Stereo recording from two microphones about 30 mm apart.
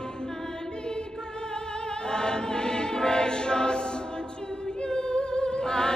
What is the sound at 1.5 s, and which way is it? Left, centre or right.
Choir, left.